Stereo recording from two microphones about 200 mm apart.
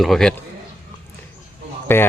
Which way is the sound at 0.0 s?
Centre (ahead or behind).